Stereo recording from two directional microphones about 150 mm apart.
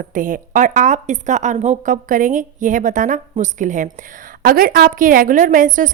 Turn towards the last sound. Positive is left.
turn(degrees=-60)  # may be behind; listen again after turning